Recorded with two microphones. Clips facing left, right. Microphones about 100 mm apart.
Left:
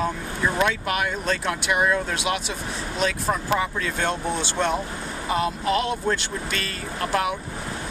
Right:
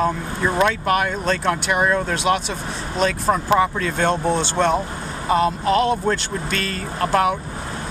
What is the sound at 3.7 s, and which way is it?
Speech, 5° left (ahead or behind).